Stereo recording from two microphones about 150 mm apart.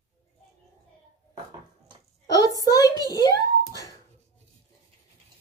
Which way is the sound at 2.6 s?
25° left (ahead or behind).